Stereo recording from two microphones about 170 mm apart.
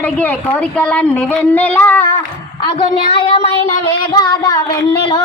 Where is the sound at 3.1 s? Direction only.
30° left (ahead or behind).